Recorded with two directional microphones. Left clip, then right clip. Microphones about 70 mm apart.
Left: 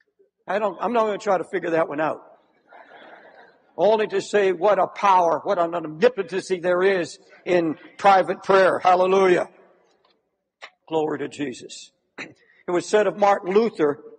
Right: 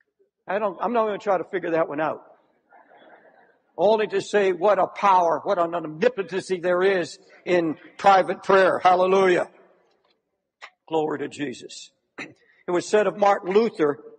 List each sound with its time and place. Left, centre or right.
0.5 s a man's voice: right